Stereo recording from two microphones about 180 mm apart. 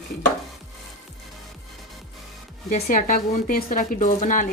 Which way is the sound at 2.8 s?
50° left (ahead or behind).